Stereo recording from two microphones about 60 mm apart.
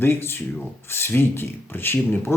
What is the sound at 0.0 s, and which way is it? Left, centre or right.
Speech, left.